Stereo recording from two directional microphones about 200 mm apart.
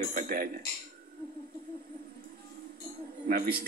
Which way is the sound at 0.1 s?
45° right (ahead or behind).